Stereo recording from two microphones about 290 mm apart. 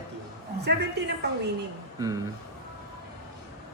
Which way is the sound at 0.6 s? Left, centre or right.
Right.